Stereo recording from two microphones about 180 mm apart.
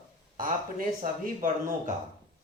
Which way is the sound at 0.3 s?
50° right (ahead or behind).